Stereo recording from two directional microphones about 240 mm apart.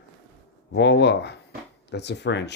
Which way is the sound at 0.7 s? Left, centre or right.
Left.